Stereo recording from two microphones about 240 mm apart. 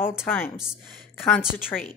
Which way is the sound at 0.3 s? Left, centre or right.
Centre.